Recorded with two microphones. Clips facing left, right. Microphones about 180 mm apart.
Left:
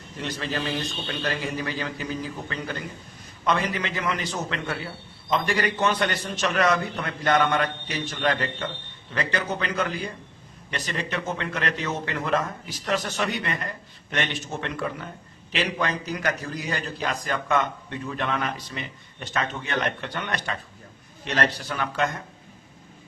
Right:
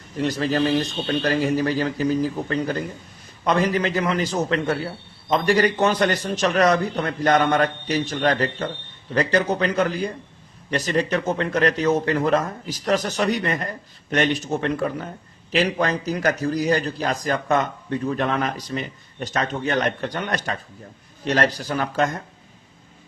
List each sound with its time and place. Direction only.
0.2 s a man's voice: 40° right (ahead or behind)